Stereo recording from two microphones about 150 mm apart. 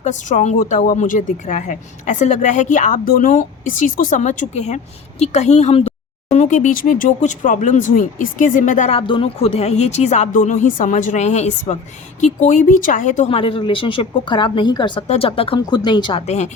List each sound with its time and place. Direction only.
0.0 s a woman's voice: 55° left (ahead or behind)
9.0 s a woman's voice: 35° left (ahead or behind); by 13.2 s 55° left (ahead or behind)
13.3 s a woman's voice: 35° left (ahead or behind)
15.0 s a woman's voice: 45° left (ahead or behind)
16.2 s speech: 50° left (ahead or behind)